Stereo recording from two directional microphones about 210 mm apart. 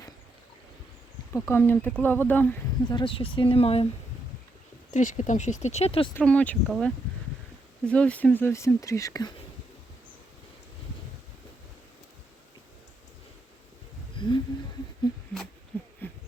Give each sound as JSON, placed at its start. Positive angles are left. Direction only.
{"t": 1.3, "sound": "speech", "side_deg": 10}
{"t": 2.8, "sound": "speech", "side_deg": 20}
{"t": 4.9, "sound": "speech", "side_deg": 35}
{"t": 6.1, "sound": "speech", "side_deg": 5}
{"t": 14.2, "sound": "a sound", "side_deg": 20}
{"t": 16.0, "sound": "hoot", "side_deg": 10}